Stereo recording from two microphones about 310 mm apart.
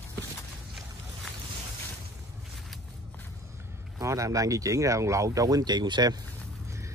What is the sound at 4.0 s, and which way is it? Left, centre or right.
Speech, centre.